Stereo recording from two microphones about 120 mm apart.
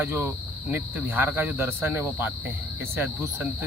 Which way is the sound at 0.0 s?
15° right (ahead or behind).